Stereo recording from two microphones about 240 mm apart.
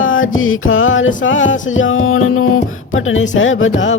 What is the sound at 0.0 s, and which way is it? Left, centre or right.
Music, left.